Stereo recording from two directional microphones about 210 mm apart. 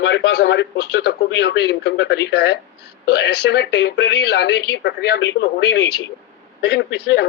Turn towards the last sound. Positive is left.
turn(degrees=50)  # may be behind; listen again after turning